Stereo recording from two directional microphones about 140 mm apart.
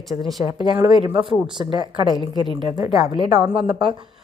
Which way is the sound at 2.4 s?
30° right (ahead or behind).